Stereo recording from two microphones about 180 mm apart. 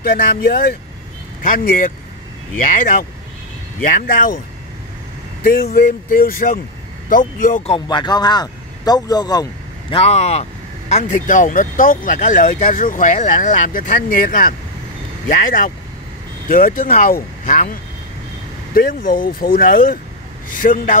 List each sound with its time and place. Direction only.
0.0 s speech: 55° left (ahead or behind)
5.4 s speech: 55° left (ahead or behind)
7.7 s speech: 25° left (ahead or behind); by 17.7 s 50° left (ahead or behind)
18.8 s speech: 50° left (ahead or behind)